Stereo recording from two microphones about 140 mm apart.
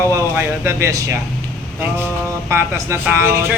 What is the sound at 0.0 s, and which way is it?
Speech, 20° right (ahead or behind).